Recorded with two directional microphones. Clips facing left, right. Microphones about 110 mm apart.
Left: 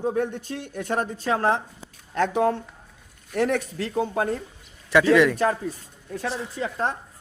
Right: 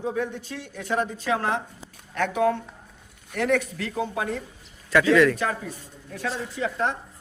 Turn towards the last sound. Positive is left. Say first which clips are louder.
# right 1 dB
turn(degrees=35)  # may be behind; listen again after turning